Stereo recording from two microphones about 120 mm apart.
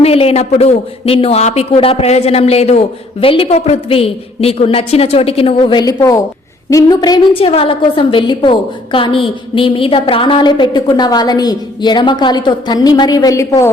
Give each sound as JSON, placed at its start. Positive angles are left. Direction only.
{"t": 0.0, "sound": "a man's voice", "side_deg": 55}
{"t": 7.3, "sound": "a woman's voice", "side_deg": 50}